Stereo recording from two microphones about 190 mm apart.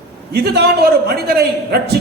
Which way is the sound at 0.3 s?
55° right (ahead or behind).